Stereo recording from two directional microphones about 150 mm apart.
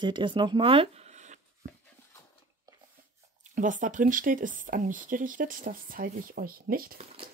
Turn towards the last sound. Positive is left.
turn(degrees=-75)  # may be behind; listen again after turning